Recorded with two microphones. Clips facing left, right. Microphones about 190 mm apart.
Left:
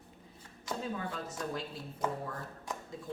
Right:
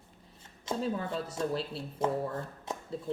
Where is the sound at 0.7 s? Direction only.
25° right (ahead or behind).